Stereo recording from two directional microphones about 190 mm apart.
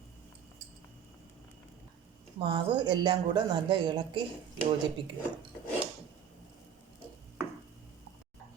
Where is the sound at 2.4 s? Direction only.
25° right (ahead or behind).